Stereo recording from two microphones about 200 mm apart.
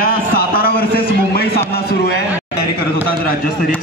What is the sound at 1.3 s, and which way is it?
Speech, 50° left (ahead or behind).